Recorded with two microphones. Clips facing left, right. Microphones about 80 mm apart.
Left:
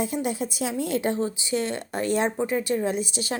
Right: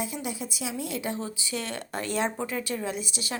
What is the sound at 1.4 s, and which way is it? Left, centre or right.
A woman's voice, left.